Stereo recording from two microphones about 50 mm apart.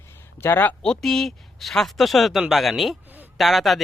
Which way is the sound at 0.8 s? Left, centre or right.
Centre.